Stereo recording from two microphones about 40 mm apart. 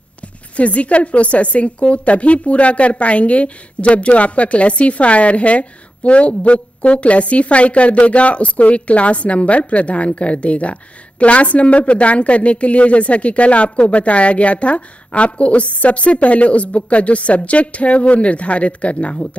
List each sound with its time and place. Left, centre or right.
0.6 s a woman's voice: left